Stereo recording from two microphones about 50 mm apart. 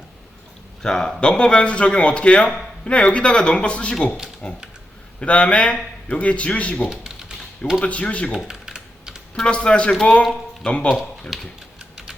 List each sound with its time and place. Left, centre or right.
0.8 s a man's voice: centre
6.8 s typing: centre
7.8 s a man's voice: left
8.3 s typing: centre
9.3 s a man's voice: centre
11.3 s speech: centre